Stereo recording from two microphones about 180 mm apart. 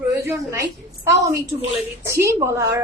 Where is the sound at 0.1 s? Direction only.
15° right (ahead or behind).